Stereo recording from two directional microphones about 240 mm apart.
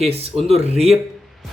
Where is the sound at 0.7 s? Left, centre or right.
Centre.